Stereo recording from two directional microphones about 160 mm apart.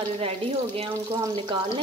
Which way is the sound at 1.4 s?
35° right (ahead or behind).